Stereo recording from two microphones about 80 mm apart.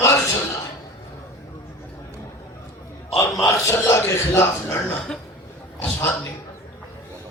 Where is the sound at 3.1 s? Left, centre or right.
Left.